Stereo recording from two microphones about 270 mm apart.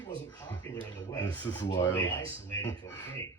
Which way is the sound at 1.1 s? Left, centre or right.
Centre.